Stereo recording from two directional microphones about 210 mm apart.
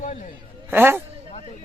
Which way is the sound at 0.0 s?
40° left (ahead or behind).